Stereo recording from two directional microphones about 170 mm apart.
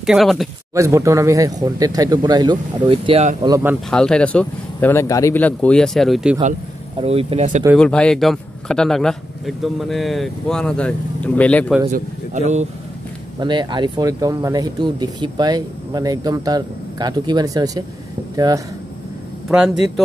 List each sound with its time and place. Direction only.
0.0 s a man's voice: centre (ahead or behind)
0.7 s speech: 20° right (ahead or behind)
3.4 s speech: 20° right (ahead or behind)
3.9 s speech: 5° left (ahead or behind)
7.0 s speech: 35° right (ahead or behind)
7.7 s a man's voice: 5° left (ahead or behind)
11.9 s speech: 45° right (ahead or behind)
13.4 s speech: 25° right (ahead or behind)
19.5 s a man's voice: 5° right (ahead or behind)